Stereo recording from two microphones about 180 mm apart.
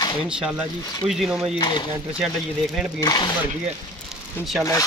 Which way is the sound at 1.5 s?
25° left (ahead or behind).